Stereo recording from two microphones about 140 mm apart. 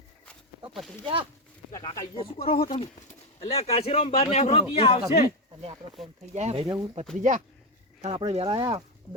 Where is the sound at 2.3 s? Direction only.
40° left (ahead or behind).